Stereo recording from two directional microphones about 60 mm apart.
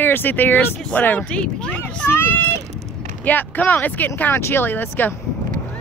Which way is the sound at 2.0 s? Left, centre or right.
Left.